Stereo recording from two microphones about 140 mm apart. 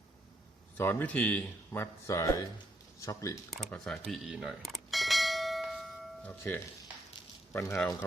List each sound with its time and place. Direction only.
0.8 s a man's voice: 15° left (ahead or behind)
3.7 s bell: 5° left (ahead or behind)
6.2 s a man's voice: 15° left (ahead or behind)